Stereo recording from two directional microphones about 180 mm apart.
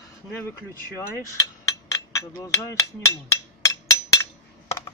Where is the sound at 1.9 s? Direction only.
20° left (ahead or behind).